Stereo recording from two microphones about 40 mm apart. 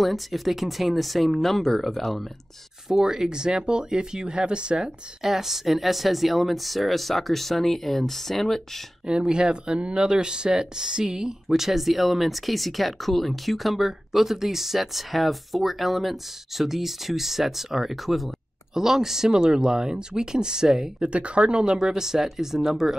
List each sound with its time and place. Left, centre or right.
0.0 s speech: centre
2.9 s speech: centre
5.2 s speech: centre
9.0 s speech: right
21.0 s speech: right; by 22.9 s centre